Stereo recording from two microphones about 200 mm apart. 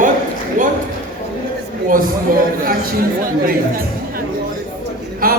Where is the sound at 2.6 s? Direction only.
45° right (ahead or behind).